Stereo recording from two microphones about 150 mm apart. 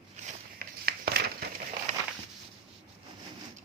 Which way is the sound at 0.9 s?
90° right.